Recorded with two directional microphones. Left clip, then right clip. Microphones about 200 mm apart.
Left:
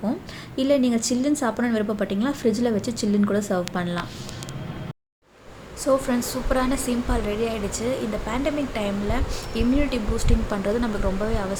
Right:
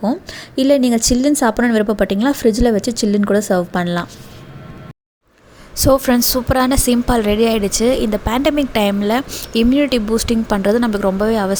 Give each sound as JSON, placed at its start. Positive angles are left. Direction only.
{"t": 0.5, "sound": "a woman's voice", "side_deg": -40}
{"t": 5.8, "sound": "a woman's voice", "side_deg": -45}